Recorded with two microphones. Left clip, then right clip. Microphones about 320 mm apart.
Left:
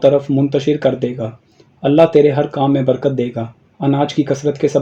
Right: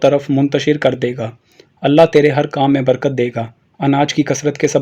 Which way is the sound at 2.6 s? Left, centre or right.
Right.